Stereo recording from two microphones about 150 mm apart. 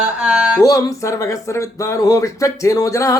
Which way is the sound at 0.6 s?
20° left (ahead or behind).